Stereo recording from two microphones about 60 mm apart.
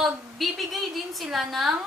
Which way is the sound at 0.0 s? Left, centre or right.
Centre.